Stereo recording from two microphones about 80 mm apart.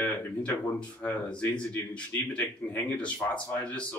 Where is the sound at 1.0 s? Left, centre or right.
Centre.